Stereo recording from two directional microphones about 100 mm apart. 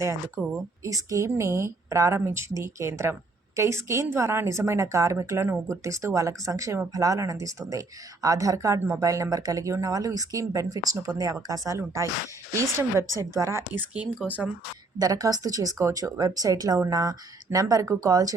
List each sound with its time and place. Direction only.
0.4 s a woman's voice: 20° right (ahead or behind)
14.9 s a woman's voice: 40° right (ahead or behind)